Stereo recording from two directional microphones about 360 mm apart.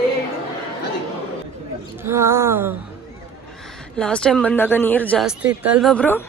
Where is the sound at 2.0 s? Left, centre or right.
Centre.